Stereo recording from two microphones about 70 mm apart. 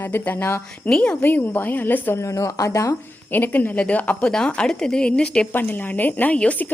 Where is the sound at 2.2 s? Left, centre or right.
Left.